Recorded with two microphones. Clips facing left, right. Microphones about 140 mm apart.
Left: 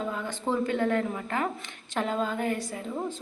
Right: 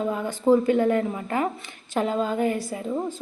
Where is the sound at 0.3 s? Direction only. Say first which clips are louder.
Right 10 dB; 10° right (ahead or behind).